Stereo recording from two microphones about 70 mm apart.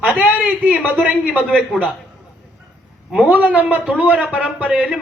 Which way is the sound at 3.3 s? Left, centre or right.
Right.